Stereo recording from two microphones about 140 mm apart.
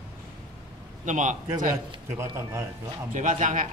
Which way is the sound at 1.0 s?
65° right (ahead or behind).